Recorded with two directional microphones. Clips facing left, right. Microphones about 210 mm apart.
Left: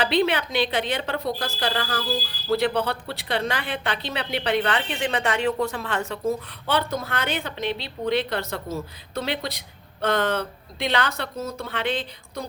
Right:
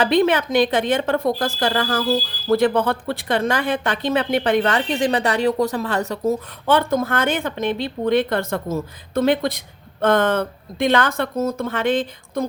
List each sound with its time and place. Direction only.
0.0 s a woman's voice: 45° right (ahead or behind)